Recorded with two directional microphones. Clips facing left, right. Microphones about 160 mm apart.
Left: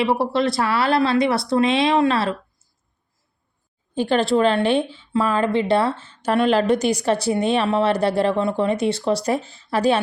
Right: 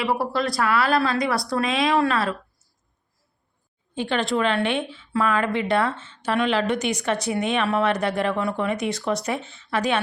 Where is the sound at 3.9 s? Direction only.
40° left (ahead or behind).